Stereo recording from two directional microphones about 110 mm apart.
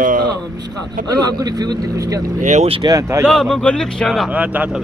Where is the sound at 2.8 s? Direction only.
30° right (ahead or behind).